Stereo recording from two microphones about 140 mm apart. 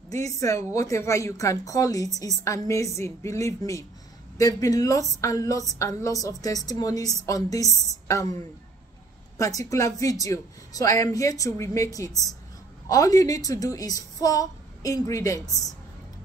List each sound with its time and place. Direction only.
0.1 s a woman's voice: 25° left (ahead or behind)
9.4 s a woman's voice: 25° left (ahead or behind)